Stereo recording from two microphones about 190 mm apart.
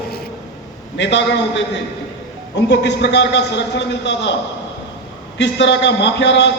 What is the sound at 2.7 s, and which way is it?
A man's voice, 65° left (ahead or behind).